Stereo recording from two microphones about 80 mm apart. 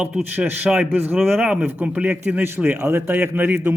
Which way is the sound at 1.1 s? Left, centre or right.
Centre.